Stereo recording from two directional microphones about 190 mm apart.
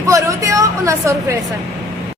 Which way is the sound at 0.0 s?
15° right (ahead or behind).